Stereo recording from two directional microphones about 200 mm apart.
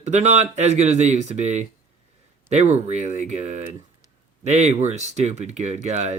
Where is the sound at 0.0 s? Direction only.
35° right (ahead or behind).